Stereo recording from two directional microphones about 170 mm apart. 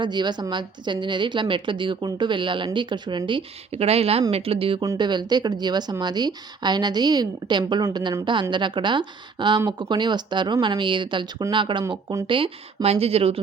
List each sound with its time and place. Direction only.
0.0 s a woman's voice: 25° right (ahead or behind)